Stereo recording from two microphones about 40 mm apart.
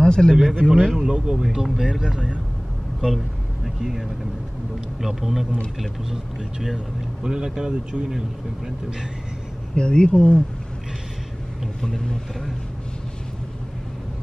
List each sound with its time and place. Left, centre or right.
0.0 s a man's voice: left
0.3 s speech: centre
0.9 s speech: centre
3.6 s speech: centre
5.0 s speech: centre
7.2 s speech: centre
9.8 s speech: left
11.8 s a man's voice: centre